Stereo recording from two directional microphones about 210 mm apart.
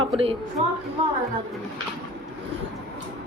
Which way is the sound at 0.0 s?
25° right (ahead or behind).